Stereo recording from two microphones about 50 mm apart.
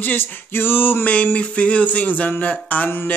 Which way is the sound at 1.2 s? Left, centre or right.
Left.